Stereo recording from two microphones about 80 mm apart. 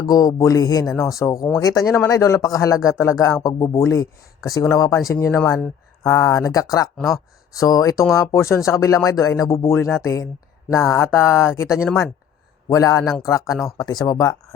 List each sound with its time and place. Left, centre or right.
0.0 s speech: left
0.9 s speech: left
6.9 s speech: centre
7.5 s speech: left
13.7 s speech: left